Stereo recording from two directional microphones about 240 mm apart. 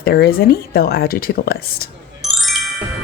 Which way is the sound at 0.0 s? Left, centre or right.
Left.